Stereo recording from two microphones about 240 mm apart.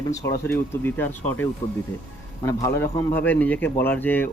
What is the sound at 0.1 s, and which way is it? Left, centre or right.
A man's voice, centre.